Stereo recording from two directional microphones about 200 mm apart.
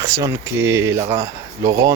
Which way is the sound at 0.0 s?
15° right (ahead or behind).